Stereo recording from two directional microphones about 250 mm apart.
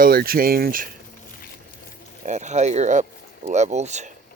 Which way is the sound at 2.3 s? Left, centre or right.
Right.